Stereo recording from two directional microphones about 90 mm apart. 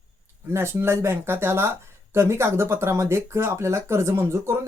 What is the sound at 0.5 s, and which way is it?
Speech, 30° right (ahead or behind).